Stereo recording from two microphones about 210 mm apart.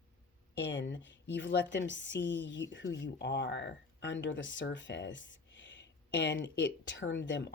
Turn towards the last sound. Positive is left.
turn(degrees=60)  # may be behind; listen again after turning